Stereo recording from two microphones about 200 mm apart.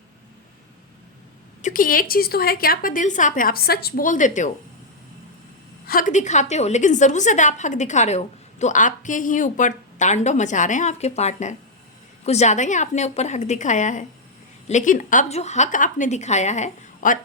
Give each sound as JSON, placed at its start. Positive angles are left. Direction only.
{"t": 1.6, "sound": "a woman's voice", "side_deg": 45}
{"t": 5.9, "sound": "a woman's voice", "side_deg": 40}